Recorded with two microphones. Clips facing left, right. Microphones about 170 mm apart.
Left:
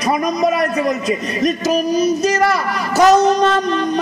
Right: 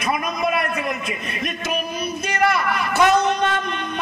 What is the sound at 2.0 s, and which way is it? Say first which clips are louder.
Child singing: left 7 dB; 40° left (ahead or behind).